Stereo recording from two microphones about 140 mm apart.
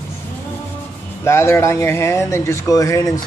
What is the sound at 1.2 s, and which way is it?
Speech, 20° left (ahead or behind).